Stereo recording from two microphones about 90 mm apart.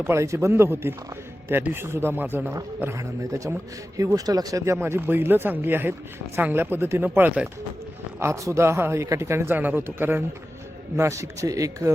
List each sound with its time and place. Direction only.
0.0 s a man's voice: 30° right (ahead or behind)
3.0 s a man's voice: 35° right (ahead or behind)